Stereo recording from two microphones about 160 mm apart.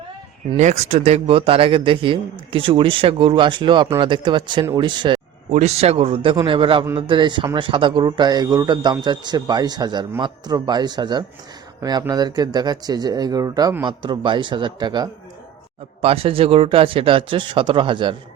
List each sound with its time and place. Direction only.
0.5 s speech: 40° right (ahead or behind)
5.5 s speech: 45° right (ahead or behind); by 15.1 s 25° right (ahead or behind)
16.0 s speech: 35° right (ahead or behind)